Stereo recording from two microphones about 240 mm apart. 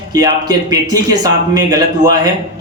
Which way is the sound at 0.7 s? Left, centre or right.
Centre.